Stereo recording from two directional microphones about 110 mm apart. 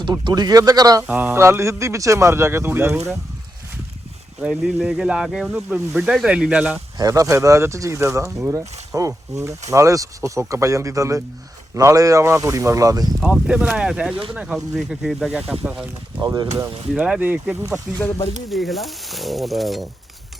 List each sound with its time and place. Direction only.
0.0 s speech: 40° right (ahead or behind)
1.0 s speech: 15° right (ahead or behind)
4.4 s speech: 5° right (ahead or behind)
7.0 s speech: 30° right (ahead or behind)
13.2 s speech: 10° right (ahead or behind)
16.2 s speech: 40° right (ahead or behind)
16.9 s speech: 5° right (ahead or behind)
17.9 s speech: 5° right (ahead or behind)